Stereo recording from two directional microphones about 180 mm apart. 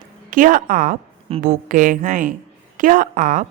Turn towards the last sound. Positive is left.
turn(degrees=-45)  # may be behind; listen again after turning